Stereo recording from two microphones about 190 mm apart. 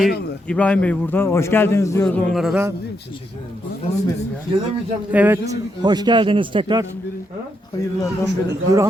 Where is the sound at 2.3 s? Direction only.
5° right (ahead or behind).